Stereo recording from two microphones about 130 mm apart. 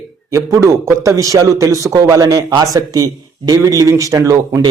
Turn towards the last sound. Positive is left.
turn(degrees=-25)  # may be behind; listen again after turning